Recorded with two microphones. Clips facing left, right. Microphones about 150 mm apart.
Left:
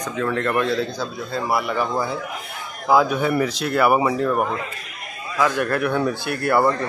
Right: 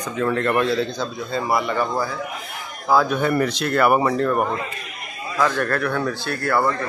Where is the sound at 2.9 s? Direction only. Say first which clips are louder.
Left 1 dB; 10° left (ahead or behind).